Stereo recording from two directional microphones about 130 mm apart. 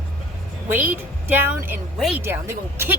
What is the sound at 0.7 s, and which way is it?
Speech, 15° right (ahead or behind).